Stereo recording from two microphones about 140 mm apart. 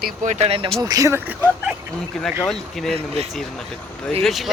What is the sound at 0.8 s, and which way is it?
Speech, 25° right (ahead or behind).